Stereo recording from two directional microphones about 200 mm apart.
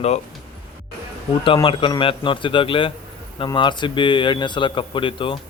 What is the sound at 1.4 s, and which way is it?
Speech, 25° left (ahead or behind).